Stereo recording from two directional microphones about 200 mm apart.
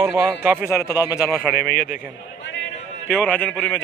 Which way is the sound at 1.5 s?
45° left (ahead or behind).